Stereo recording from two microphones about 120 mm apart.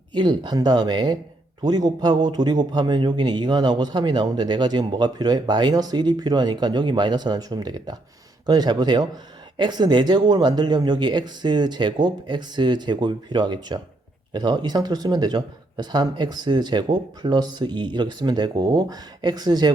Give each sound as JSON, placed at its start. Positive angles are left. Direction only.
{"t": 0.1, "sound": "a man's voice", "side_deg": -40}